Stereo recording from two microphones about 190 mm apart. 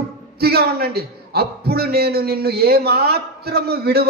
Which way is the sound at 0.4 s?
55° right (ahead or behind).